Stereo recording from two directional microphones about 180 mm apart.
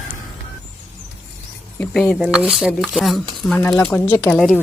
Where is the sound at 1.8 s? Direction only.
5° left (ahead or behind).